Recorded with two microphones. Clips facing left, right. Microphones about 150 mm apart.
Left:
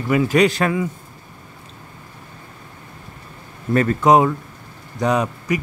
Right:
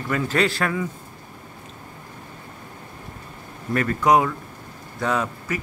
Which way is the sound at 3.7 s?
25° left (ahead or behind).